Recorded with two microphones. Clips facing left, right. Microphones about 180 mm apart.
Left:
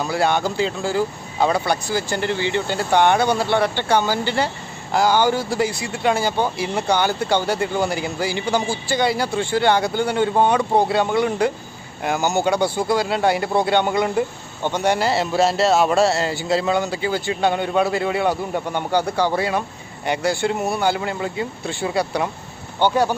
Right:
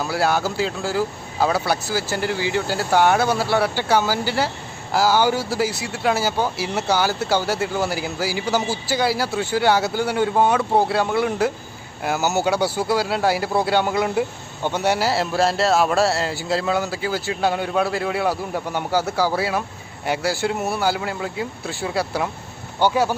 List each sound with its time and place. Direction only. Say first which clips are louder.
0.0 s speech: left 1 dB; 5° right (ahead or behind)